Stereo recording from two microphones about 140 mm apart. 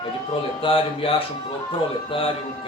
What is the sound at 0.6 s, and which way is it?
A man's voice, 40° left (ahead or behind).